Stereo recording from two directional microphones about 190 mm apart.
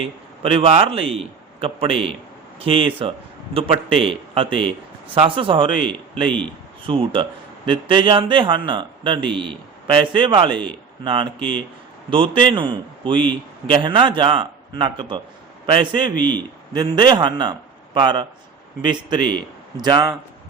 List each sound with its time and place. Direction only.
0.0 s a man's voice: 30° right (ahead or behind)